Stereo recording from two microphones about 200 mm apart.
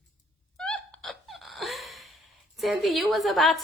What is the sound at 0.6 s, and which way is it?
Hiccup, 5° left (ahead or behind).